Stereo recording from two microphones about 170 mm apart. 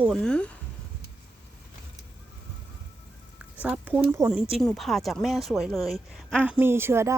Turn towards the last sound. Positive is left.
turn(degrees=-15)  # may be behind; listen again after turning